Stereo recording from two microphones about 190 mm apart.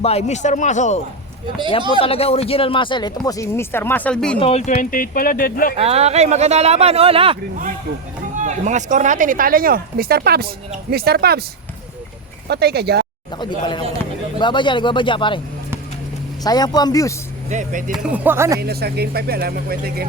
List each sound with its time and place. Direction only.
0.0 s speech: 35° left (ahead or behind); by 4.4 s 5° left (ahead or behind)
4.4 s speech: 35° left (ahead or behind); by 5.7 s 50° left (ahead or behind)
5.7 s speech: 30° right (ahead or behind)
8.4 s speech: 40° right (ahead or behind); by 11.4 s 55° right (ahead or behind)
12.5 s speech: 60° right (ahead or behind)
14.3 s speech: 25° left (ahead or behind)
16.4 s speech: 20° left (ahead or behind)
17.5 s speech: 40° right (ahead or behind)
18.0 s speech: 10° right (ahead or behind)
18.6 s speech: 55° right (ahead or behind)